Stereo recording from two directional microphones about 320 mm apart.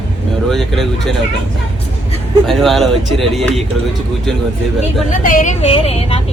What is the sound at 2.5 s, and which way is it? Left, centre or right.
Speech, centre.